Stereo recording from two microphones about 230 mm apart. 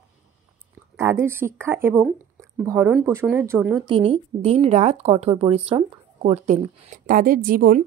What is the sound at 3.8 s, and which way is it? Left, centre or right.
Speech, right.